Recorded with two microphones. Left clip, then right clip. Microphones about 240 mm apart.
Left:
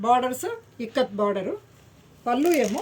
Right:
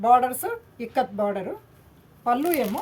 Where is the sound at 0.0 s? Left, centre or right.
Right.